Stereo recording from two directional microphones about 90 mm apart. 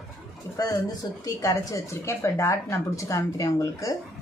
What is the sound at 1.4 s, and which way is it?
A woman's voice, 35° left (ahead or behind).